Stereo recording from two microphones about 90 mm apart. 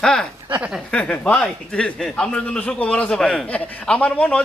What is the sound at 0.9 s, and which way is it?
A man's voice, 15° left (ahead or behind).